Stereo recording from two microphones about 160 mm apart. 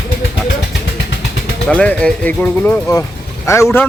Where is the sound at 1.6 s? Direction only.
10° left (ahead or behind).